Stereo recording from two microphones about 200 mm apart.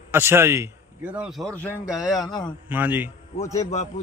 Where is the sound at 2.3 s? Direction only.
20° left (ahead or behind).